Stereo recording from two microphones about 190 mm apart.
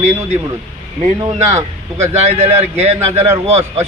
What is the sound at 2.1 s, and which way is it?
Speech, 35° right (ahead or behind).